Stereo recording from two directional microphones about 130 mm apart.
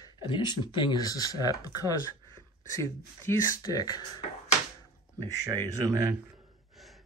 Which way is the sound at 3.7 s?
30° left (ahead or behind).